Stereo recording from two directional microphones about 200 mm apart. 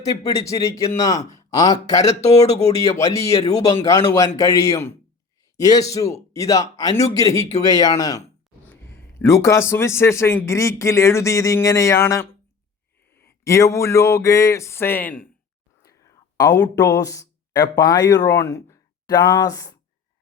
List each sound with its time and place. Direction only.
0.0 s a man's voice: 20° left (ahead or behind)
16.4 s speech: 15° left (ahead or behind)